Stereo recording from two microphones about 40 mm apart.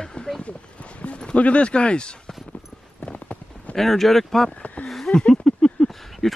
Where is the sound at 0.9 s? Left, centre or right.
Left.